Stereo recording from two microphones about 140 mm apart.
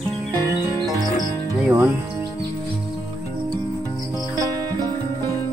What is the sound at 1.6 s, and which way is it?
Speech, 20° right (ahead or behind).